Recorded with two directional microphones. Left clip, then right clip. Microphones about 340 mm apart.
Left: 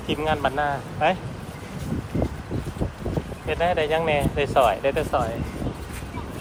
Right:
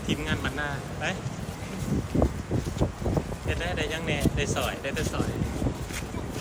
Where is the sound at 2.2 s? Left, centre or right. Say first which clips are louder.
Right 1 dB; centre.